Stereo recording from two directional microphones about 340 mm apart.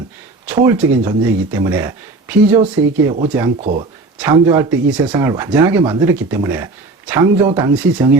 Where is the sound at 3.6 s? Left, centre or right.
Centre.